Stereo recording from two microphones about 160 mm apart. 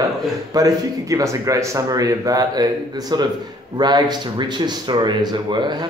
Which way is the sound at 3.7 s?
25° right (ahead or behind).